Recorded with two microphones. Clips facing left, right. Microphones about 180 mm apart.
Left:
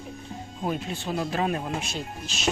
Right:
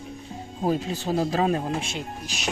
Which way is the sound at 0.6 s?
35° right (ahead or behind).